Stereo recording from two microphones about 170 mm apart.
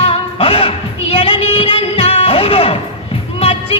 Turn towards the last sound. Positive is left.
turn(degrees=35)  # may be behind; listen again after turning